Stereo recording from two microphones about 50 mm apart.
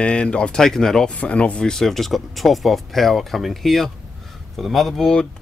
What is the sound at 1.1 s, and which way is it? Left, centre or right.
Speech, left.